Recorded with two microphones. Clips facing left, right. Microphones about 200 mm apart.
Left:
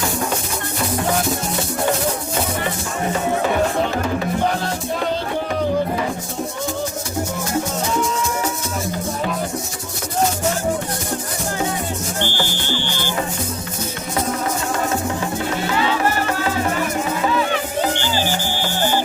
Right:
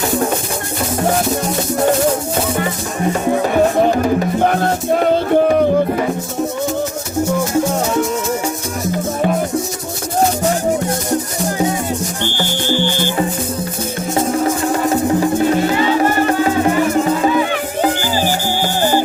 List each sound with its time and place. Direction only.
4.4 s music: 55° right (ahead or behind)
12.6 s music: 50° right (ahead or behind)